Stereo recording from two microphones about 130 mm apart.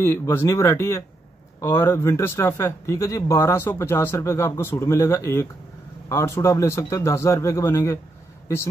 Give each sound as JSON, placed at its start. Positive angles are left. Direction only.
{"t": 0.0, "sound": "speech", "side_deg": 20}